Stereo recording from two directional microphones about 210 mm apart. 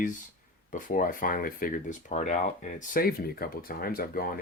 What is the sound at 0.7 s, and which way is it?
Speech, 40° left (ahead or behind).